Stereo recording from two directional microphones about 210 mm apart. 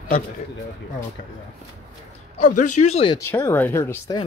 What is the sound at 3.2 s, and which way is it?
Speech, 15° left (ahead or behind).